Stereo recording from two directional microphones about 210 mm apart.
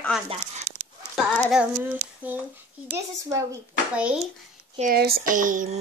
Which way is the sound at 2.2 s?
10° right (ahead or behind).